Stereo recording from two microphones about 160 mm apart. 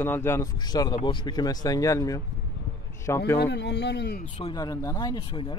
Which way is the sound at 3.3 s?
90° left.